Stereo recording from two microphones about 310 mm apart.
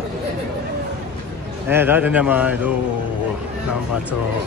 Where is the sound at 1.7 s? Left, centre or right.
Centre.